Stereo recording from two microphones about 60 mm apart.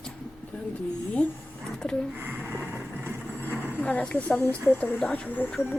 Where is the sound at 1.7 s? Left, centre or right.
Centre.